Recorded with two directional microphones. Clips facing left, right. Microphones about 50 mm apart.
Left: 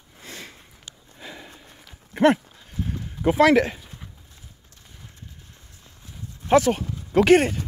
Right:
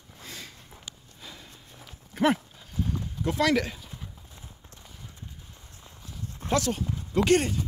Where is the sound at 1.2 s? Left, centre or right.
Left.